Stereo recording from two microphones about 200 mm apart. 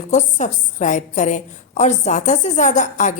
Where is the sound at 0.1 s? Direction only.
35° left (ahead or behind).